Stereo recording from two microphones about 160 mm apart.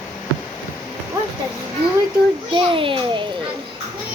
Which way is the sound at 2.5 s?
35° right (ahead or behind).